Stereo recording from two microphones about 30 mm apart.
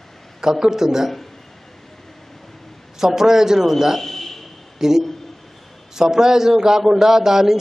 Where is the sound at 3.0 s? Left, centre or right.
Centre.